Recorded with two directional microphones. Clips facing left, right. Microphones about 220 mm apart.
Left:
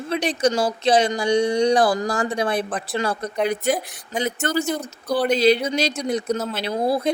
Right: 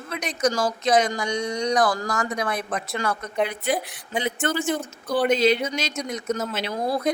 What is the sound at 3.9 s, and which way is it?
Speech, 45° left (ahead or behind).